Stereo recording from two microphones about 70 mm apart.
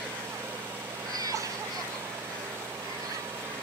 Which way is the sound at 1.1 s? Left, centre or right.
Right.